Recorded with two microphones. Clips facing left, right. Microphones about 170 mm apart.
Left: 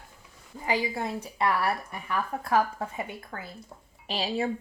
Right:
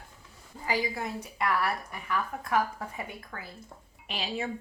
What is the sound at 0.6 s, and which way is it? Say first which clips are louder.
A woman's voice: left 2 dB; 25° left (ahead or behind).